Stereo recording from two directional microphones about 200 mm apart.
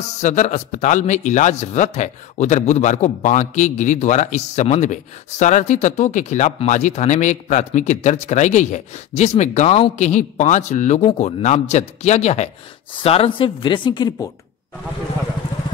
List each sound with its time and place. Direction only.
0.2 s a man's voice: 35° left (ahead or behind); by 14.3 s 20° left (ahead or behind)